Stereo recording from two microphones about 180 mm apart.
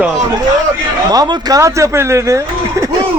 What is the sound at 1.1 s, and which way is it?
Speech, 20° right (ahead or behind).